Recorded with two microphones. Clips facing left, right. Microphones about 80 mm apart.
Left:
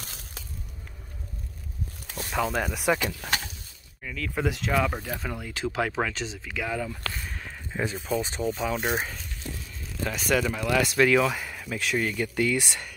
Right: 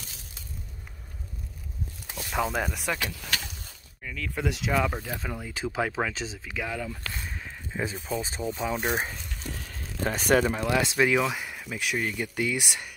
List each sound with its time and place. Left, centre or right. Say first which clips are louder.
0.0 s a sound: left 4 dB; left
2.3 s speech: left 1 dB; centre
2.9 s speech: left 5 dB; left
4.0 s speech: left 2 dB; centre
7.2 s a sound: even; centre
7.9 s speech: left 3 dB; centre
8.9 s speech: even; centre
9.6 s a sound: right 1 dB; right
10.0 s speech: right 3 dB; right; by 12.9 s centre